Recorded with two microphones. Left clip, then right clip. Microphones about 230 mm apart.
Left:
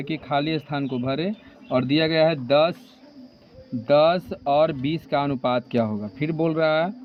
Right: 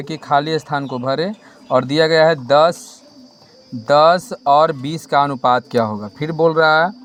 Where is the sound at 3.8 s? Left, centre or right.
Centre.